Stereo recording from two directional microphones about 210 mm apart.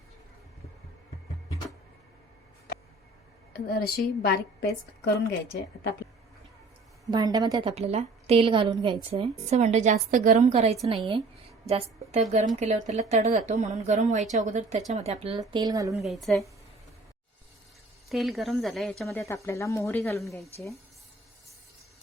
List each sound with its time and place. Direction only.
3.7 s a woman's voice: 45° left (ahead or behind)
7.1 s a woman's voice: 20° right (ahead or behind)
7.8 s a woman's voice: 30° right (ahead or behind)
12.5 s a woman's voice: 35° right (ahead or behind)
15.5 s a woman's voice: 15° right (ahead or behind)
16.3 s speech: 5° left (ahead or behind)
18.1 s speech: centre (ahead or behind)
19.2 s speech: 15° left (ahead or behind)